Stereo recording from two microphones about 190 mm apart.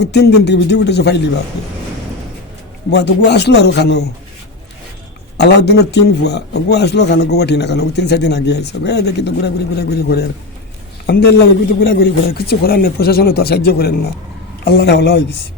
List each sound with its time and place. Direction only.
0.0 s a man's voice: 60° left (ahead or behind)
2.9 s a man's voice: 65° left (ahead or behind)
5.4 s a man's voice: 60° left (ahead or behind)